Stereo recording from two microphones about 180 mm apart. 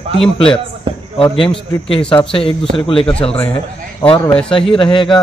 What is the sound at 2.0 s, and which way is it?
Speech, 5° left (ahead or behind).